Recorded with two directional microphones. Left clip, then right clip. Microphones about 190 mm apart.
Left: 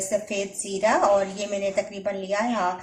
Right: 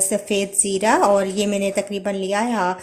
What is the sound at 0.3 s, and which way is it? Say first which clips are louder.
A woman's voice: right 8 dB; 55° right (ahead or behind).